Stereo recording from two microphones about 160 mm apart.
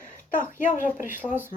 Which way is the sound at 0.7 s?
50° left (ahead or behind).